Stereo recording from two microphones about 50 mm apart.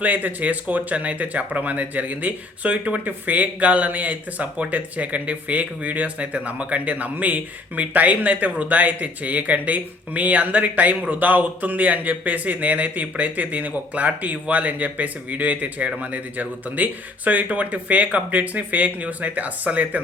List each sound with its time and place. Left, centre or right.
0.0 s speech: right